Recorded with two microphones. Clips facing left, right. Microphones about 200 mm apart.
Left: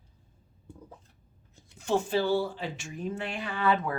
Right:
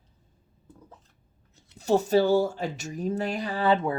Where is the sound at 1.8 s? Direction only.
40° right (ahead or behind).